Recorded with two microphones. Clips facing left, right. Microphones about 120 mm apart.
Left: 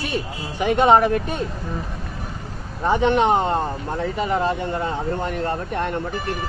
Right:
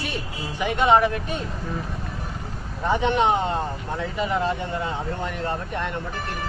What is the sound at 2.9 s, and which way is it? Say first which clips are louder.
Speech: left 3 dB; 45° left (ahead or behind).